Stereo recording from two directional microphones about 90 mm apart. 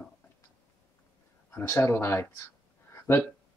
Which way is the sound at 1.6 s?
25° left (ahead or behind).